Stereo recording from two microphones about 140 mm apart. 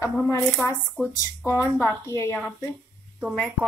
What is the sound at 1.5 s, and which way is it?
Speech, 15° left (ahead or behind).